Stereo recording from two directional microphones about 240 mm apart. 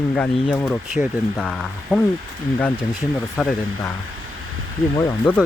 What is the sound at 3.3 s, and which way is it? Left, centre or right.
Speech, centre.